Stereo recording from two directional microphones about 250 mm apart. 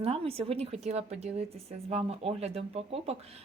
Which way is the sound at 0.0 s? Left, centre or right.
Right.